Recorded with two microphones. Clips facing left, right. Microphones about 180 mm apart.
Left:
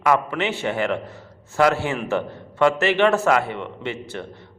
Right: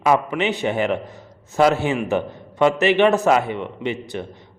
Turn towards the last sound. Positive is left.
turn(degrees=-15)  # may be behind; listen again after turning